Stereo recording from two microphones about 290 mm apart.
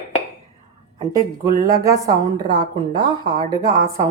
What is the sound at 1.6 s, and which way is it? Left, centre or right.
Speech, centre.